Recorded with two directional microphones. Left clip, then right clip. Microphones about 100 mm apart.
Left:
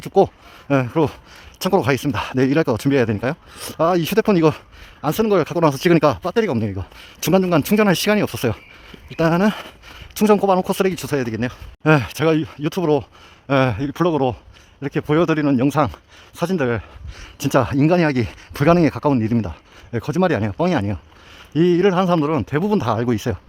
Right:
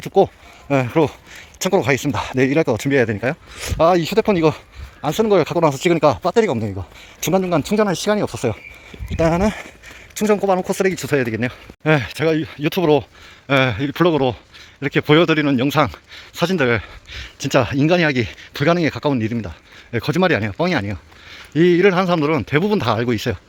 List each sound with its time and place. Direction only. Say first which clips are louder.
0.1 s speech: even; 35° left (ahead or behind)
1.5 s speech: right 1 dB; 25° left (ahead or behind)
4.0 s speech: right 1 dB; 45° left (ahead or behind)
5.2 s speech: right 2 dB; 20° left (ahead or behind)
6.1 s speech: right 3 dB; 15° left (ahead or behind)
6.5 s speech: right 1 dB; 25° left (ahead or behind)
9.0 s speech: even; 20° left (ahead or behind)
11.8 s speech: left 1 dB; 25° left (ahead or behind)
12.5 s speech: right 3 dB; 20° left (ahead or behind)
17.5 s speech: right 1 dB; 25° left (ahead or behind)
19.9 s speech: right 2 dB; 15° left (ahead or behind)
20.2 s speech: right 2 dB; 25° left (ahead or behind)
20.5 s speech: even; 15° left (ahead or behind)
23.0 s speech: right 1 dB; 30° left (ahead or behind)